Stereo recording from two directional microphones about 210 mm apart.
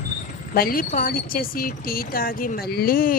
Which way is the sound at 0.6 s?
45° left (ahead or behind).